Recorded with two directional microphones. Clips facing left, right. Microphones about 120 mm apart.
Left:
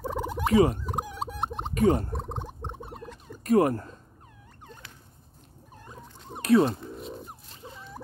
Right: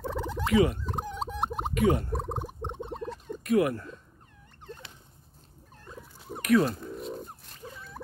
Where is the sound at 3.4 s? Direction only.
40° left (ahead or behind).